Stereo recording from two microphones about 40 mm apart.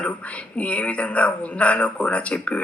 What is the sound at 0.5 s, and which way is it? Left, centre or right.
Speech, left.